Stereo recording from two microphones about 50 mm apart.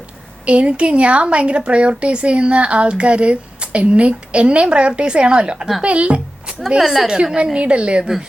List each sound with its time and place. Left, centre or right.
0.4 s speech: right
6.7 s a woman's voice: centre
7.1 s speech: centre